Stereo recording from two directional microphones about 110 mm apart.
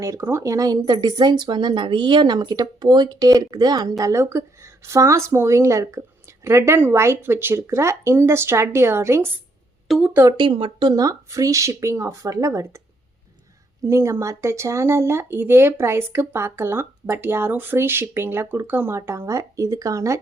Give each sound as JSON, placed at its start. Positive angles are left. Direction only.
{"t": 0.0, "sound": "speech", "side_deg": -25}
{"t": 10.3, "sound": "speech", "side_deg": -50}
{"t": 13.8, "sound": "speech", "side_deg": -25}